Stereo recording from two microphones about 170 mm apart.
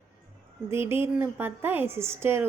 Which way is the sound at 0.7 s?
15° right (ahead or behind).